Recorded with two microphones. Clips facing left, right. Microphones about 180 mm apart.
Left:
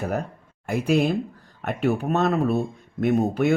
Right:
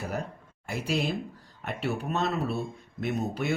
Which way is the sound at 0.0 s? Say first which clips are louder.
Left 6 dB; 60° left (ahead or behind).